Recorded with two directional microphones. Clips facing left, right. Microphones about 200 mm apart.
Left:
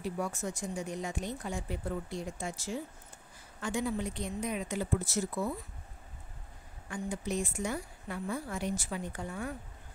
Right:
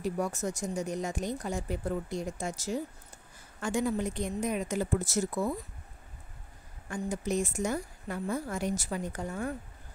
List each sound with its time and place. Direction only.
0.0 s a woman's voice: 40° right (ahead or behind)
6.9 s a woman's voice: 45° right (ahead or behind)